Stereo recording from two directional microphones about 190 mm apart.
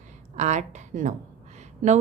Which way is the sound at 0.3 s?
40° right (ahead or behind).